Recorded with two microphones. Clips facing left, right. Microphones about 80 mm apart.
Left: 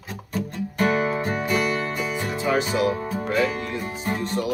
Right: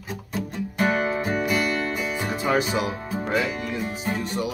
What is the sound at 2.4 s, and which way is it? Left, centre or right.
Music, right.